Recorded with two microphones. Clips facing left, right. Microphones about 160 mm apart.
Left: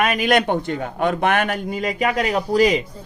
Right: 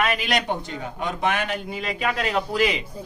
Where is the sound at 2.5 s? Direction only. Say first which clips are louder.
Left 8 dB; 40° left (ahead or behind).